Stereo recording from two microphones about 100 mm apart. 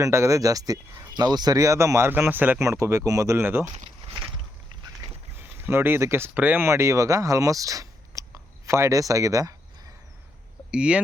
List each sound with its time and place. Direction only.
0.0 s speech: 30° right (ahead or behind)
5.4 s speech: 20° right (ahead or behind)
10.7 s speech: 10° right (ahead or behind)